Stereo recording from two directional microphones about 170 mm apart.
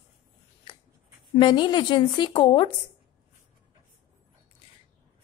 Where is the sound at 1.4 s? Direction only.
30° left (ahead or behind).